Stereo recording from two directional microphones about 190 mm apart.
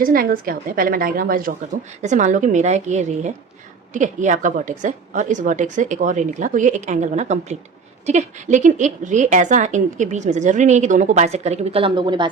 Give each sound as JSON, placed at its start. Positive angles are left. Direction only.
{"t": 0.0, "sound": "a woman's voice", "side_deg": -50}